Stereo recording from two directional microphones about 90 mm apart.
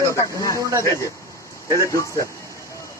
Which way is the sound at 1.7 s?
35° left (ahead or behind).